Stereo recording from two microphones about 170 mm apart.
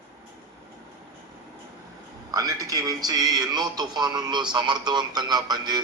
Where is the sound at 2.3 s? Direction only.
20° right (ahead or behind).